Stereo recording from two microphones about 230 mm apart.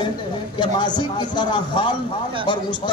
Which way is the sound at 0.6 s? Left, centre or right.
Centre.